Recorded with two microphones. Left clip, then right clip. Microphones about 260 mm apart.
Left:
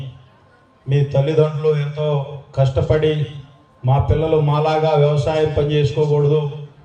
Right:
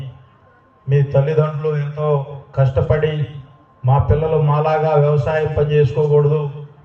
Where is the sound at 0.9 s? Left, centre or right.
Left.